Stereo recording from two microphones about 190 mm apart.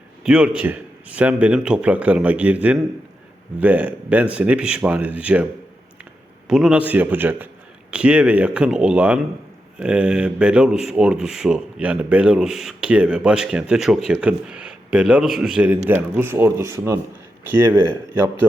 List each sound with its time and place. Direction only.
0.2 s a man's voice: 5° right (ahead or behind)
6.5 s a man's voice: 5° right (ahead or behind)